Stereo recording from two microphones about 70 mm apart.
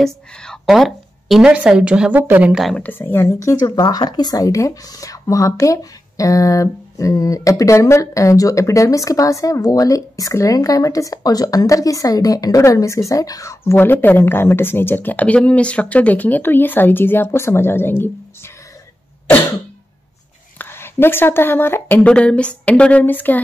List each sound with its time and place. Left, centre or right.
0.0 s speech: centre
0.7 s a sound: centre
1.4 s a woman's voice: centre
2.1 s speech: right
2.7 s speech: left
3.8 s speech: left
13.7 s a woman's voice: left
20.5 s speech: left
22.0 s speech: centre